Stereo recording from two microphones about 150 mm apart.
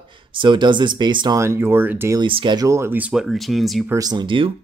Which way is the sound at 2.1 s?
35° right (ahead or behind).